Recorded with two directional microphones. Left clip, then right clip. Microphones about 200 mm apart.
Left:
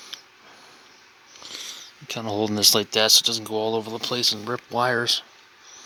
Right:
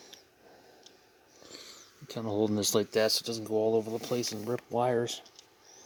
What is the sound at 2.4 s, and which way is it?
Speech, 5° right (ahead or behind).